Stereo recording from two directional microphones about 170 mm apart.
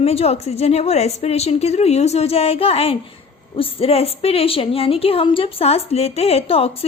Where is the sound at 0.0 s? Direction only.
35° left (ahead or behind).